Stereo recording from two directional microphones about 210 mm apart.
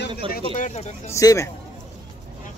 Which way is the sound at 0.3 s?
35° left (ahead or behind).